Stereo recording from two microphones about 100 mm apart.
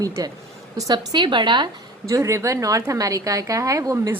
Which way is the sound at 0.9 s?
50° right (ahead or behind).